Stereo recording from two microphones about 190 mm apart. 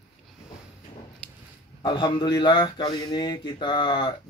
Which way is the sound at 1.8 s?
25° left (ahead or behind).